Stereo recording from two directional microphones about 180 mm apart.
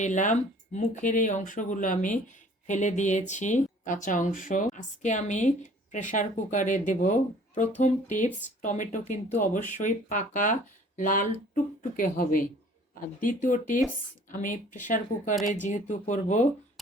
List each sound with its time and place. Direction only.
0.0 s speech: 45° left (ahead or behind)
8.1 s speech: 45° left (ahead or behind)